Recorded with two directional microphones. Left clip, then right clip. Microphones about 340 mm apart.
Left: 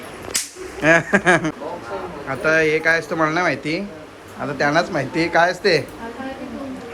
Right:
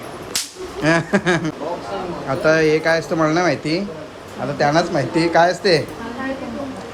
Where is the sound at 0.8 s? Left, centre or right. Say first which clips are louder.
Left 2 dB; centre.